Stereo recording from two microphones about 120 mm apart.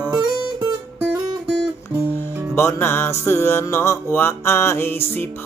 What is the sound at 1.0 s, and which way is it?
Music, 15° right (ahead or behind).